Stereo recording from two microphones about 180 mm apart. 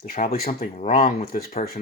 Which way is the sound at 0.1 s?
40° left (ahead or behind).